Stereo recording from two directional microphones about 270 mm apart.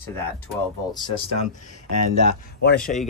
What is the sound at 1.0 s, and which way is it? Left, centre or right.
Speech, left.